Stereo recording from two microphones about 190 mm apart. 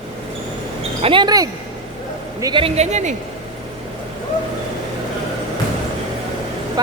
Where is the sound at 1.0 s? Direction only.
25° right (ahead or behind).